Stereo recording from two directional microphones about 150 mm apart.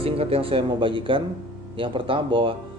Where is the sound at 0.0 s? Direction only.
40° right (ahead or behind).